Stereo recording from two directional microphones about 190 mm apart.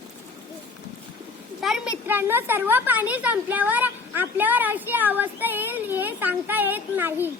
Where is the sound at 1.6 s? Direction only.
Centre (ahead or behind).